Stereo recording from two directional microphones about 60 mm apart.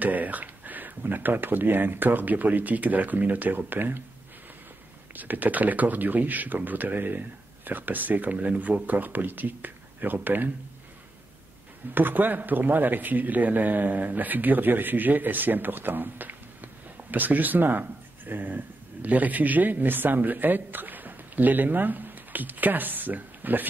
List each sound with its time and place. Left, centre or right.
0.0 s speech: right
5.1 s speech: right
11.9 s speech: right